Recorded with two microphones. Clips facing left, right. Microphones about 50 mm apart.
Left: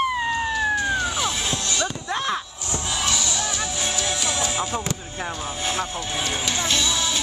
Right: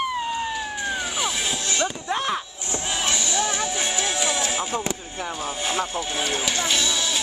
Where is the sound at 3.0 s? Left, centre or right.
Right.